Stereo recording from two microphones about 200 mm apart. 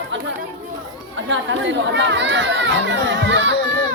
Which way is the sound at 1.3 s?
65° right (ahead or behind).